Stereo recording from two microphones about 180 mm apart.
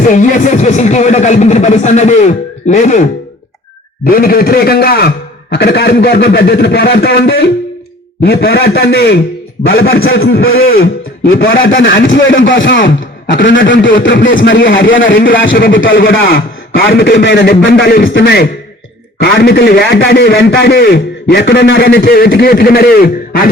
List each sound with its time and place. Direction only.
0.1 s speech: 45° left (ahead or behind)
4.0 s a man's voice: 55° left (ahead or behind); by 10.4 s 90° left
10.5 s a man's voice: 55° left (ahead or behind)
11.5 s speech: 90° left
16.7 s a man's voice: 60° left (ahead or behind)